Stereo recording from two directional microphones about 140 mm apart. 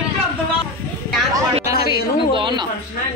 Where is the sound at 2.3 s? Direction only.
35° right (ahead or behind).